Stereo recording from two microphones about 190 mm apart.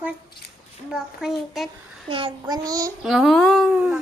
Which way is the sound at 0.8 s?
5° right (ahead or behind).